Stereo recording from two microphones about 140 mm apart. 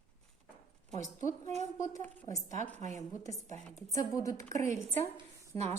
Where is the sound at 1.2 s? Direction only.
60° right (ahead or behind).